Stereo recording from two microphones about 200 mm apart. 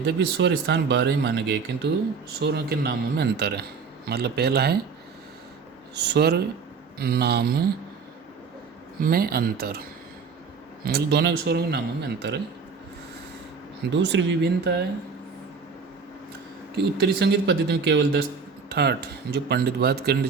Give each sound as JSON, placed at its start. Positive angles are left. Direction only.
{"t": 0.0, "sound": "speech", "side_deg": -60}
{"t": 5.9, "sound": "speech", "side_deg": -55}
{"t": 9.0, "sound": "speech", "side_deg": -50}
{"t": 10.8, "sound": "speech", "side_deg": -55}
{"t": 13.9, "sound": "speech", "side_deg": -65}
{"t": 16.7, "sound": "speech", "side_deg": -55}